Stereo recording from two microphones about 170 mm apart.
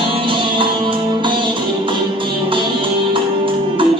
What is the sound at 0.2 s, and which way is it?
Music, 30° right (ahead or behind).